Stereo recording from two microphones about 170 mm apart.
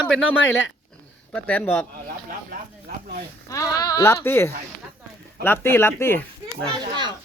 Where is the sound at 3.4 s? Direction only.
20° left (ahead or behind).